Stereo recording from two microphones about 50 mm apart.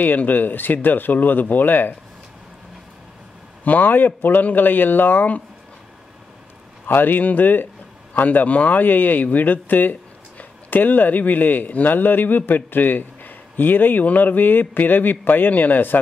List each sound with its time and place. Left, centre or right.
0.0 s speech: left
3.6 s speech: left
6.9 s speech: left